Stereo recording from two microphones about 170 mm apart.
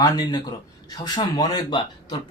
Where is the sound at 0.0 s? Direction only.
25° left (ahead or behind).